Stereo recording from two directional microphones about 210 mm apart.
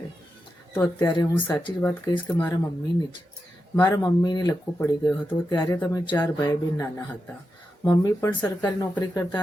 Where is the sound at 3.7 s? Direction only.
15° left (ahead or behind).